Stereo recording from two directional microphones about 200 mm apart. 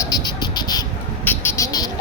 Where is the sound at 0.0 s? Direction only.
20° left (ahead or behind).